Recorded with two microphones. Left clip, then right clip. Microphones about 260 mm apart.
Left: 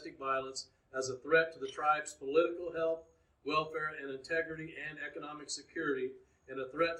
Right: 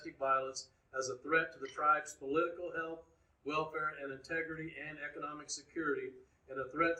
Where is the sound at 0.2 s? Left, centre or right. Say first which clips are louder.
Right 2 dB; centre.